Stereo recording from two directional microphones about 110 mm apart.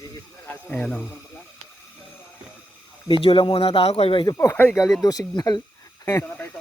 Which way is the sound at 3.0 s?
55° left (ahead or behind).